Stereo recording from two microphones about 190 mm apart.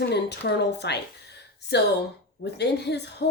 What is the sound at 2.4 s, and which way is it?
Speech, 60° left (ahead or behind).